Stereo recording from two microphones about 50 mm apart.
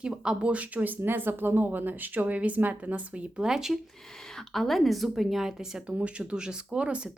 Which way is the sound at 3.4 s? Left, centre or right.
Centre.